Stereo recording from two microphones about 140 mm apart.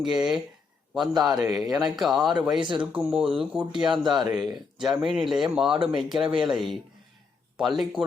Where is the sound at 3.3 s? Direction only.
10° right (ahead or behind).